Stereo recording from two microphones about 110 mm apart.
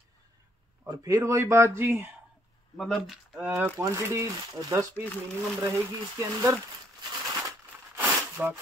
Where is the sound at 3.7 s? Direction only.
25° right (ahead or behind).